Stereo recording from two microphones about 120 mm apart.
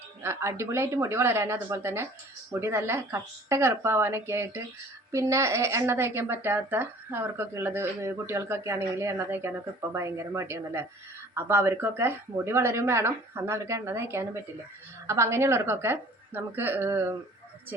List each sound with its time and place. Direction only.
0.2 s speech: 20° right (ahead or behind)